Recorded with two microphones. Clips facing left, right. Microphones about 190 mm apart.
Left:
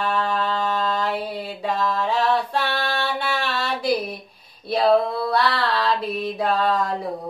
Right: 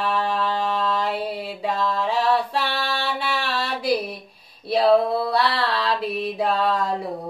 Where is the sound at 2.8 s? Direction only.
55° left (ahead or behind).